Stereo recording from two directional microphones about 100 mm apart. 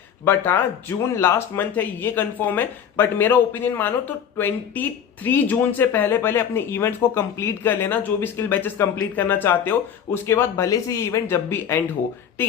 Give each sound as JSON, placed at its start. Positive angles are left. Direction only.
{"t": 0.3, "sound": "speech", "side_deg": 20}